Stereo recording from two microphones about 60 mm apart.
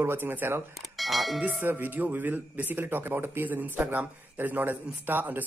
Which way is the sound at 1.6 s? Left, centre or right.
Right.